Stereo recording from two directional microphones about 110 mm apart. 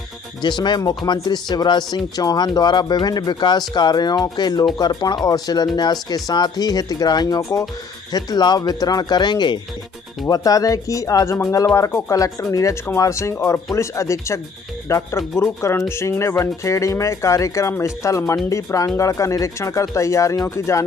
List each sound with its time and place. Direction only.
0.4 s speech: 40° left (ahead or behind)
10.2 s speech: 30° left (ahead or behind)